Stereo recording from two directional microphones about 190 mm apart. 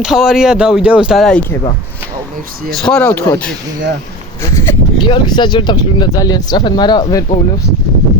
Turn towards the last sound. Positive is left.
turn(degrees=20)  # may be behind; listen again after turning